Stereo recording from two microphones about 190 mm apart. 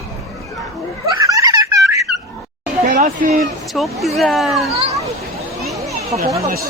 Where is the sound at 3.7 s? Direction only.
Centre (ahead or behind).